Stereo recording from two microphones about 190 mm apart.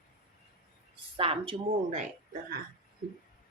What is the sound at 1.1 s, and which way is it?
Speech, 30° right (ahead or behind).